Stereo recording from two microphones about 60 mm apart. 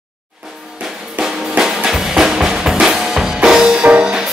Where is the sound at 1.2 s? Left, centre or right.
Right.